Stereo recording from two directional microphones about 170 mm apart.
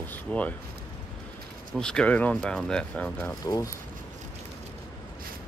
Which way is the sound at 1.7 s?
5° left (ahead or behind).